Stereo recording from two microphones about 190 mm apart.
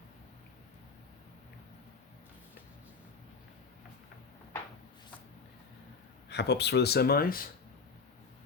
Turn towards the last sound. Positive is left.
turn(degrees=50)  # may be behind; listen again after turning